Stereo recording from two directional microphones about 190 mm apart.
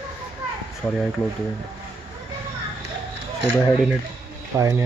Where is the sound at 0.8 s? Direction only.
Centre (ahead or behind).